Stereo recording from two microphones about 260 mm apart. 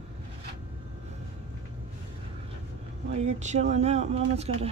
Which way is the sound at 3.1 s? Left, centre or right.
Right.